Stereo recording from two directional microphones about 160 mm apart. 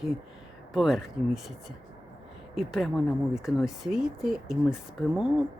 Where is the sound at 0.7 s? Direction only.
Centre (ahead or behind).